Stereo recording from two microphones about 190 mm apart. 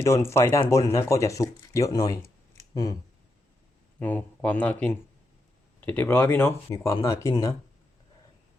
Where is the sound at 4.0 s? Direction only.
10° left (ahead or behind).